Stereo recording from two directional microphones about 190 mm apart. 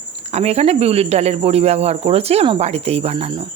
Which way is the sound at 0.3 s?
35° right (ahead or behind).